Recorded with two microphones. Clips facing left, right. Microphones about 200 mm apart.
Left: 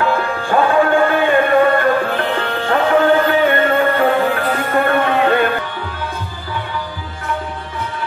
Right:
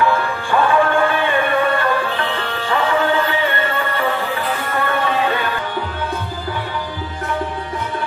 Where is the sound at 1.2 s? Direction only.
45° left (ahead or behind).